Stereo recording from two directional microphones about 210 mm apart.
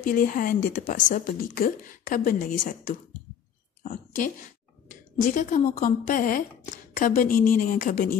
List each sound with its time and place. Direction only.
0.0 s a woman's voice: 40° left (ahead or behind)